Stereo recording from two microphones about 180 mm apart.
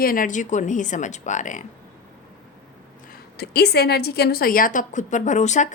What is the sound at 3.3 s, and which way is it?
A woman's voice, 65° left (ahead or behind).